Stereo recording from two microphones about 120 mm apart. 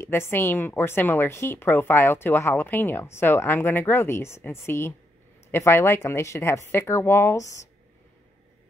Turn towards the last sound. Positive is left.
turn(degrees=25)  # may be behind; listen again after turning